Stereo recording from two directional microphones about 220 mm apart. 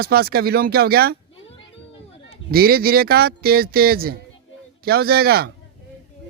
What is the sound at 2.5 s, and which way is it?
Speech, 45° right (ahead or behind).